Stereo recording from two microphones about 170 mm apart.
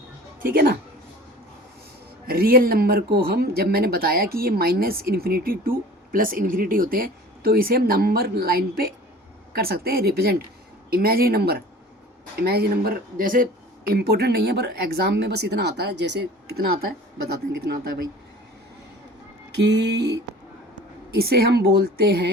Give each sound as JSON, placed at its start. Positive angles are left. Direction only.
{"t": 0.3, "sound": "speech", "side_deg": -60}
{"t": 2.2, "sound": "speech", "side_deg": -60}
{"t": 19.5, "sound": "a sound", "side_deg": -90}
{"t": 21.1, "sound": "speech", "side_deg": -65}